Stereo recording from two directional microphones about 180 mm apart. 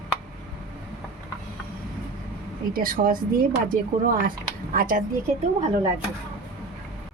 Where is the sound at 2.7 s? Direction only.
50° right (ahead or behind).